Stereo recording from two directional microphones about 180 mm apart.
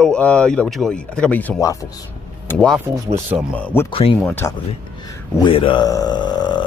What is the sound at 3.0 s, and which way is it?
Speech, 10° right (ahead or behind).